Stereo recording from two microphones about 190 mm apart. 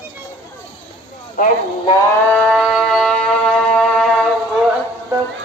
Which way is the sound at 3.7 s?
5° left (ahead or behind).